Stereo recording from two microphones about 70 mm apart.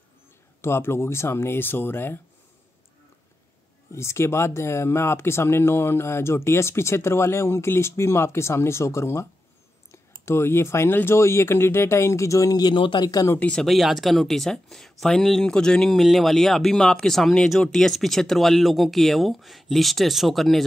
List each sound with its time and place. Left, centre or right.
0.6 s speech: left
3.9 s speech: left
13.6 s speech: centre